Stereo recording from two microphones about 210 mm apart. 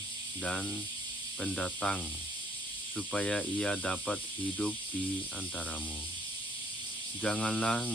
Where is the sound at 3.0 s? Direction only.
5° left (ahead or behind).